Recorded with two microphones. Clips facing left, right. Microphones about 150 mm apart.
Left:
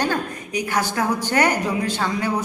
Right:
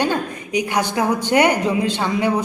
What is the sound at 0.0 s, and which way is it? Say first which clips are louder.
Speech: right 3 dB; 20° right (ahead or behind).